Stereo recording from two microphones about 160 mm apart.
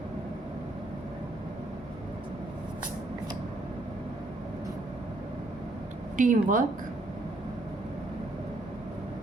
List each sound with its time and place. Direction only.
6.1 s speech: 55° right (ahead or behind)